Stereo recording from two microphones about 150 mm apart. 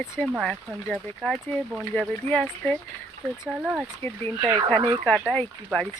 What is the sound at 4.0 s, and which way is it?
Speech, 15° left (ahead or behind).